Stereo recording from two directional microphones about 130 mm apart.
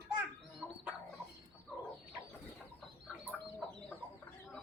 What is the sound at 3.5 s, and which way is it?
Chicken, 5° left (ahead or behind).